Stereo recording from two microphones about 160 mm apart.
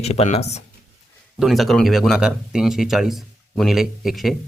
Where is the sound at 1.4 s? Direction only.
Centre (ahead or behind).